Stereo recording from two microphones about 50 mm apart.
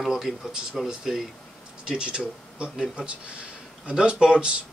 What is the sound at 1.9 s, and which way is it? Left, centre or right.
Speech, right.